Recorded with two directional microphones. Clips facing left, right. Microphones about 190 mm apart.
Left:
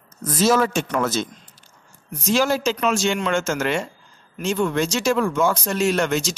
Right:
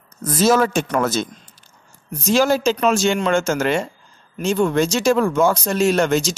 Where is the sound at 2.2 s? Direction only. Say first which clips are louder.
Right 3 dB; 40° right (ahead or behind).